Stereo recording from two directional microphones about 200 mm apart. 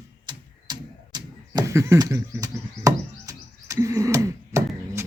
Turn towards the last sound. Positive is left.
turn(degrees=-15)  # may be behind; listen again after turning